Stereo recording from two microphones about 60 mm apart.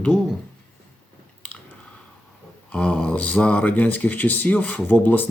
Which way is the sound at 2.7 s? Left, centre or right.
Left.